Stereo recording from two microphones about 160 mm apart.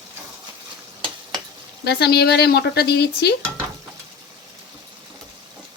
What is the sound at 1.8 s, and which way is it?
Speech, 90° left.